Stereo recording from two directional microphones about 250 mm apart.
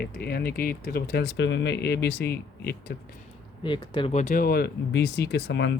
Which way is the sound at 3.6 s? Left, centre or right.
Centre.